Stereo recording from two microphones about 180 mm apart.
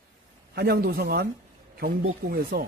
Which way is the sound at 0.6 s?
60° right (ahead or behind).